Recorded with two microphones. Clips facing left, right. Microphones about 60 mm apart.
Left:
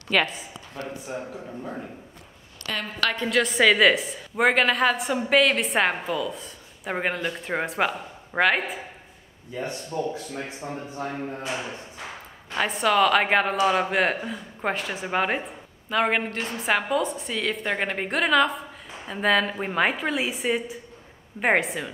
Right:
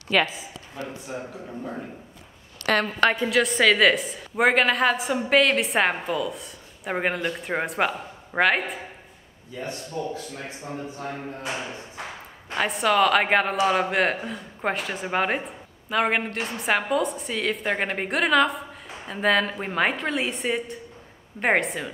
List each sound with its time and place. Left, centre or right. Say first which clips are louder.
0.1 s speech: right 1 dB; centre
2.6 s a woman's voice: right 8 dB; right
3.2 s speech: even; centre
9.5 s speech: left 2 dB; left
12.5 s speech: even; centre